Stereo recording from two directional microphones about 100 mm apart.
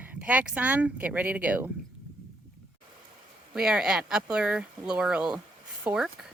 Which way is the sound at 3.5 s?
5° right (ahead or behind).